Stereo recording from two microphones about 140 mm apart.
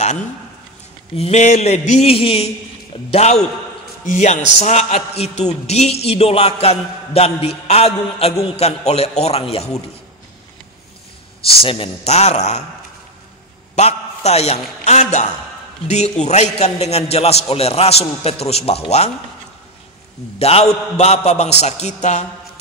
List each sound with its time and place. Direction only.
1.1 s a man's voice: 50° left (ahead or behind)
11.6 s a man's voice: 40° left (ahead or behind)
13.7 s a man's voice: 50° left (ahead or behind)
20.3 s a man's voice: 45° left (ahead or behind)